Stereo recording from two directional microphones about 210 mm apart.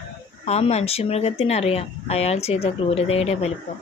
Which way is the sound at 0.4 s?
30° left (ahead or behind).